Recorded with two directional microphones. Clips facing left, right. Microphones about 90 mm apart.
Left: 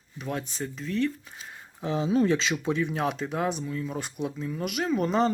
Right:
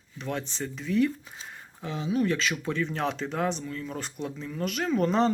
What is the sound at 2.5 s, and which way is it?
Speech, 15° left (ahead or behind).